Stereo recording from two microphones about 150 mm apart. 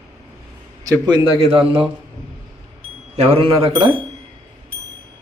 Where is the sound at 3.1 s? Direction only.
45° right (ahead or behind).